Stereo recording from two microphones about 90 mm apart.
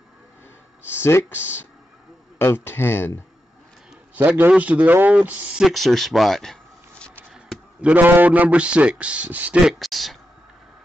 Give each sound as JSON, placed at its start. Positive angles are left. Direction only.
{"t": 0.8, "sound": "speech", "side_deg": 25}
{"t": 4.1, "sound": "a man's voice", "side_deg": -20}
{"t": 5.7, "sound": "speech", "side_deg": 0}
{"t": 7.8, "sound": "a man's voice", "side_deg": -20}
{"t": 9.7, "sound": "speech", "side_deg": 0}